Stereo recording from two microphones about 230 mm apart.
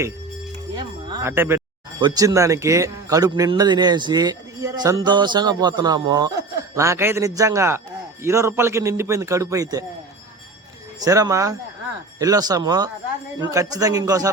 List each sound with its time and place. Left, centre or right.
0.8 s a man's voice: centre
11.0 s a man's voice: centre